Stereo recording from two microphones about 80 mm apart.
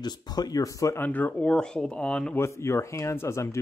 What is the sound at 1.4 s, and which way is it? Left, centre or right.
Speech, centre.